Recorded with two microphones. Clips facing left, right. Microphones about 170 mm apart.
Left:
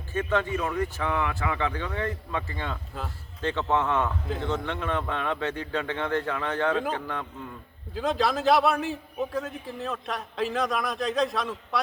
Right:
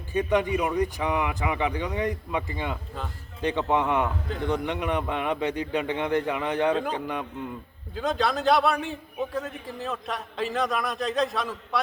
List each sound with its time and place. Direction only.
0.1 s speech: 15° right (ahead or behind)
7.9 s a man's voice: centre (ahead or behind)